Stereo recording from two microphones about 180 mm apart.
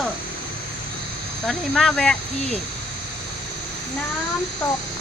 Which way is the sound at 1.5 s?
5° left (ahead or behind).